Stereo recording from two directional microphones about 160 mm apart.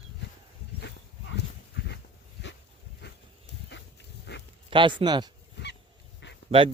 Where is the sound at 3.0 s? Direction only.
90° left.